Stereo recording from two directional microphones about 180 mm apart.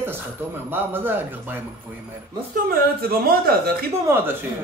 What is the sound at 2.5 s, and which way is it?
A woman's voice, 55° right (ahead or behind).